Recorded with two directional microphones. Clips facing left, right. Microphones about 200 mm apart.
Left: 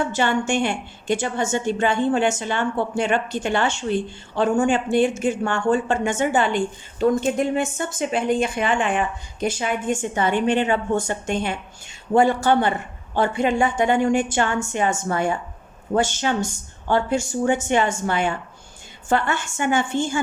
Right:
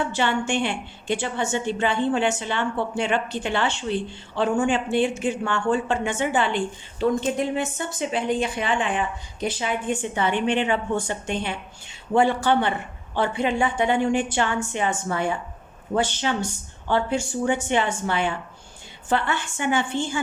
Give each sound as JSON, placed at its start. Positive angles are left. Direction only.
{"t": 0.1, "sound": "a woman's voice", "side_deg": 45}